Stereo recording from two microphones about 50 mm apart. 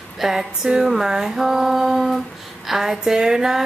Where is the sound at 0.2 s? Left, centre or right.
Centre.